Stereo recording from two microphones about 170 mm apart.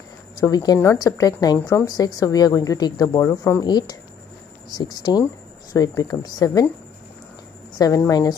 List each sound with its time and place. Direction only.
0.4 s speech: 20° left (ahead or behind)
7.7 s a sound: 20° left (ahead or behind)
8.0 s speech: 20° left (ahead or behind)